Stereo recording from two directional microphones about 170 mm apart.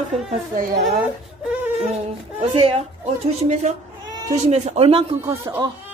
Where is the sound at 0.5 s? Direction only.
55° right (ahead or behind).